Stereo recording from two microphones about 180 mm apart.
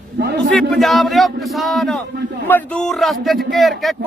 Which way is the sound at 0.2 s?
60° right (ahead or behind).